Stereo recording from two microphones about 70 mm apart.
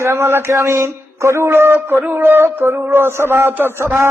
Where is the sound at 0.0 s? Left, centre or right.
Right.